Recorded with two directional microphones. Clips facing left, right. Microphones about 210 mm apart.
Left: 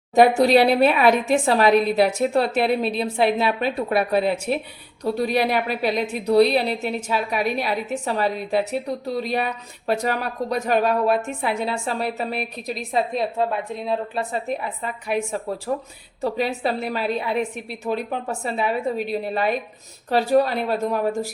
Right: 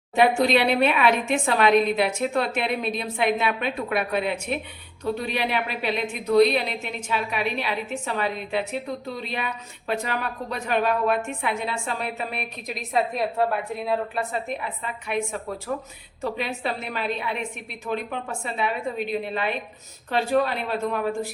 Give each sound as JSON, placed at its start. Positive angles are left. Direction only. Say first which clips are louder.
{"t": 0.1, "sound": "a woman's voice", "louder": "left 5 dB", "side_deg": 40}